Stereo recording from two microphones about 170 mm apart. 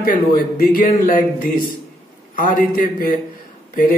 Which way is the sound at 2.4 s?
55° left (ahead or behind).